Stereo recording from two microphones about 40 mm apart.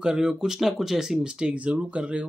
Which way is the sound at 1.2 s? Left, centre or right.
Right.